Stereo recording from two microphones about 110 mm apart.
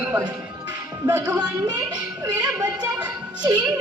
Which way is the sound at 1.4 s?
40° right (ahead or behind).